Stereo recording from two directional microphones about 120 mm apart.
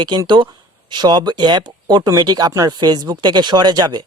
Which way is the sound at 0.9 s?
40° right (ahead or behind).